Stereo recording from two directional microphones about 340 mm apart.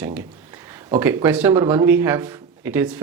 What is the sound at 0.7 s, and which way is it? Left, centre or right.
Speech, centre.